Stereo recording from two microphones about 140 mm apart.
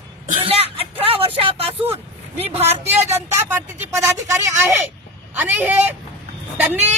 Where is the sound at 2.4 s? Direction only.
45° right (ahead or behind).